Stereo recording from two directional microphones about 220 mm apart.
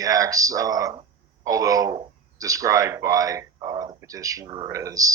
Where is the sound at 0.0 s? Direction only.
15° right (ahead or behind).